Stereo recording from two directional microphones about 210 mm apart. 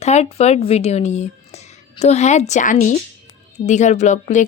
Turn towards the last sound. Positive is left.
turn(degrees=35)  # may be behind; listen again after turning